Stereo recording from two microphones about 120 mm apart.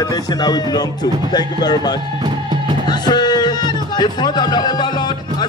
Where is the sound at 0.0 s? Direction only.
35° left (ahead or behind).